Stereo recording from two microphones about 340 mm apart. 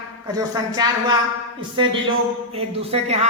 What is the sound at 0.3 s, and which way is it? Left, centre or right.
Speech, centre.